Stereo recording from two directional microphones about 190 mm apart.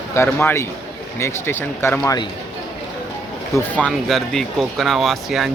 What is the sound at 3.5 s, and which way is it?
Speech, 5° left (ahead or behind).